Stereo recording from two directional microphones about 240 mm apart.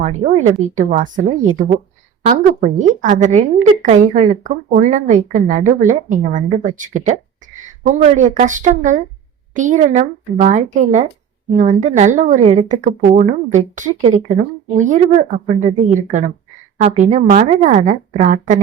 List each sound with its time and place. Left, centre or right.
0.0 s speech: right
2.2 s speech: right